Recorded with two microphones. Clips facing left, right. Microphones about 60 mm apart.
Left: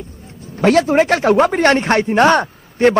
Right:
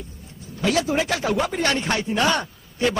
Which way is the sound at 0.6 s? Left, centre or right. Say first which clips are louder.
Left 9 dB; left.